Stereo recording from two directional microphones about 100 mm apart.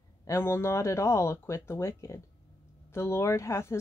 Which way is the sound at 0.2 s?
25° left (ahead or behind).